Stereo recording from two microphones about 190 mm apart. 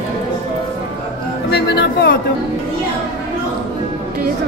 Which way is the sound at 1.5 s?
60° left (ahead or behind).